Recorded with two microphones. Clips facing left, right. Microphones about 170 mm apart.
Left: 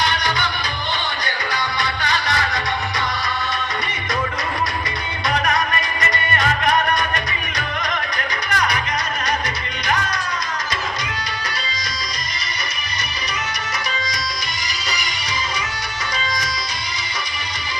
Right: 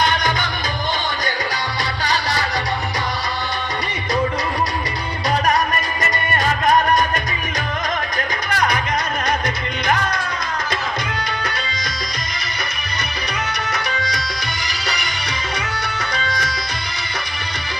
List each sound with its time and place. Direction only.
0.0 s music: 50° right (ahead or behind)
1.8 s music: 35° right (ahead or behind)
5.5 s music: 40° right (ahead or behind)
8.4 s music: 50° right (ahead or behind)
9.8 s music: 55° right (ahead or behind)
13.9 s tabla: 60° right (ahead or behind)
16.1 s tabla: 60° right (ahead or behind)